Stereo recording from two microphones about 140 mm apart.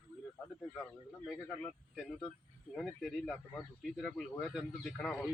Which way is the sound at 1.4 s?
10° left (ahead or behind).